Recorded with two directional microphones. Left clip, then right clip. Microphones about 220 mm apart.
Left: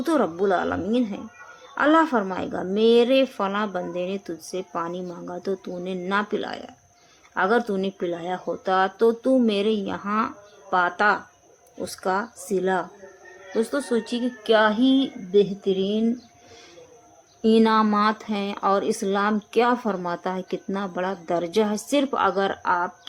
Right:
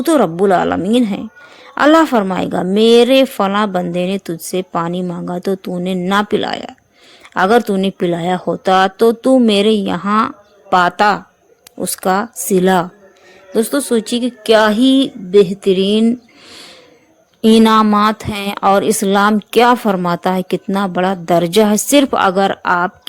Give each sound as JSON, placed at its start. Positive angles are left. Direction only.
{"t": 0.0, "sound": "a woman's voice", "side_deg": -40}
{"t": 17.4, "sound": "a woman's voice", "side_deg": -40}